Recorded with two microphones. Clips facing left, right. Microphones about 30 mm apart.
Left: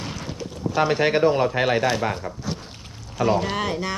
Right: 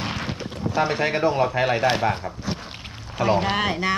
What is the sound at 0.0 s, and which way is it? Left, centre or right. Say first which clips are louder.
Boat: right 3 dB; right.